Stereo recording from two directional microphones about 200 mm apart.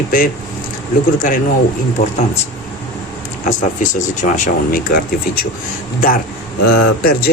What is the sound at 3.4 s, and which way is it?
Speech, 40° left (ahead or behind).